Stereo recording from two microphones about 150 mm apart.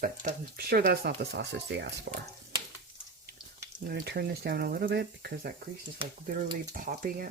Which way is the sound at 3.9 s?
90° right.